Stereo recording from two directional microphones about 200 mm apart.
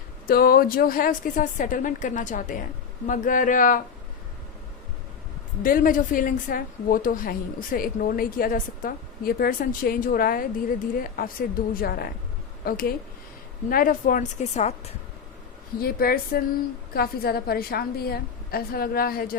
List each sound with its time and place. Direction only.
0.3 s a woman's voice: 50° left (ahead or behind)
5.6 s a woman's voice: 45° left (ahead or behind)
15.8 s a woman's voice: 50° left (ahead or behind)